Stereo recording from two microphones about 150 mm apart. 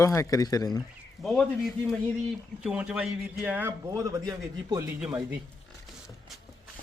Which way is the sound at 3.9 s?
20° right (ahead or behind).